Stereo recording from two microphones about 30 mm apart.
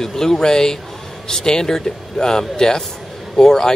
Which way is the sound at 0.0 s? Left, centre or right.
Centre.